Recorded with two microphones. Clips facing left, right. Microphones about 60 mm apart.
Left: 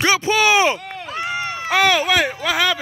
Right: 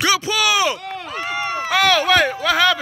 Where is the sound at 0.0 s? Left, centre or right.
Left.